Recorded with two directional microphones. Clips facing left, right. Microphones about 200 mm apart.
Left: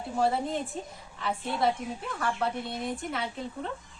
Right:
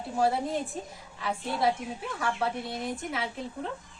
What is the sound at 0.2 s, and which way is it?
Speech, 5° right (ahead or behind).